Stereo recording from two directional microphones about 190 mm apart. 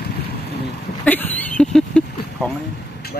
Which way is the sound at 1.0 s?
10° left (ahead or behind).